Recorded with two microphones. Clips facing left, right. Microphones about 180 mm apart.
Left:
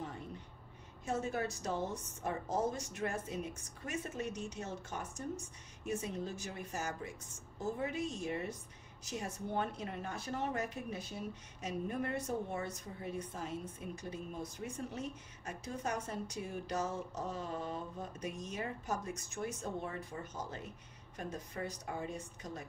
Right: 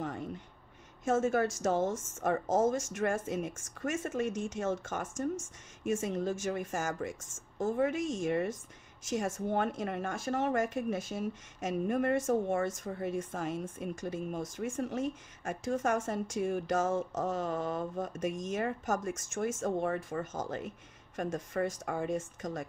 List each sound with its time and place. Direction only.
1.0 s speech: 90° right